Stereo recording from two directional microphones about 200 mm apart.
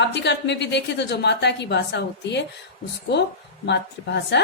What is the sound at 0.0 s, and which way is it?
A woman's voice, 60° left (ahead or behind).